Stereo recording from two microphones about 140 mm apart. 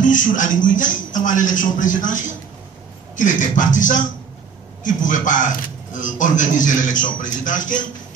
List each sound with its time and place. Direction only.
0.0 s a man's voice: 65° left (ahead or behind)
3.2 s a man's voice: 65° left (ahead or behind)